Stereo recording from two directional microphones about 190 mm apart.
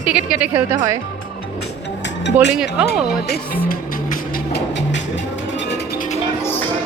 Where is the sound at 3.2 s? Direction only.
50° left (ahead or behind).